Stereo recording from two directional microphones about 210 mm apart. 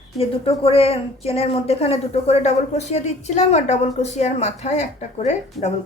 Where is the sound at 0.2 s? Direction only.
25° left (ahead or behind).